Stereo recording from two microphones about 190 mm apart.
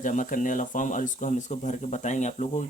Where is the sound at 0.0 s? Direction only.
40° left (ahead or behind).